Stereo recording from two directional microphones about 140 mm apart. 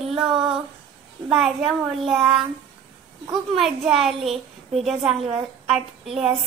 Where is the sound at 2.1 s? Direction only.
5° right (ahead or behind).